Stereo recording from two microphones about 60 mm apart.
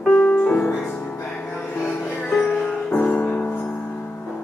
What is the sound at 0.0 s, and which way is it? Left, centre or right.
Music, left.